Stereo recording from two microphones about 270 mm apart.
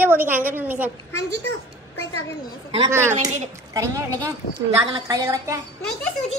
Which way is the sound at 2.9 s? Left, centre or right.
Centre.